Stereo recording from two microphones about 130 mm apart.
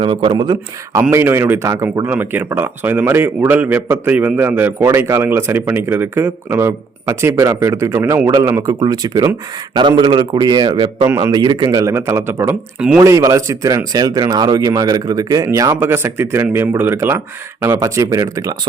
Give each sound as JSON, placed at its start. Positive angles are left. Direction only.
{"t": 0.0, "sound": "a man's voice", "side_deg": -40}
{"t": 1.1, "sound": "a man's voice", "side_deg": -20}
{"t": 8.8, "sound": "a man's voice", "side_deg": -30}